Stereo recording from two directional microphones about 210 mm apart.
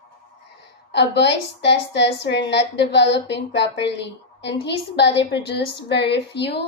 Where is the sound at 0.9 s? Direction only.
55° left (ahead or behind).